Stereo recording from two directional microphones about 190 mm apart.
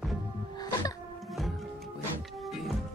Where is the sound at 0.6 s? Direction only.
20° left (ahead or behind).